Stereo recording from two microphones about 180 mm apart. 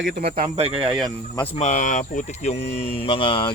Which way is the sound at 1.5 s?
40° left (ahead or behind).